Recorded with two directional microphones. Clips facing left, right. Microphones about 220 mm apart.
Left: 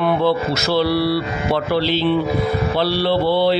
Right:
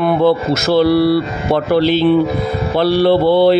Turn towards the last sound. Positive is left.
turn(degrees=-50)  # may be behind; listen again after turning